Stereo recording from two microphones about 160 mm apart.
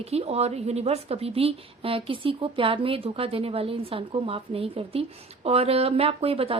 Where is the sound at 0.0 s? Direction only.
40° right (ahead or behind).